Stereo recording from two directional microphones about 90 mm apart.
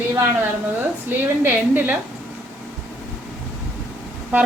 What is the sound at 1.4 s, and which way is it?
Speech, 20° right (ahead or behind).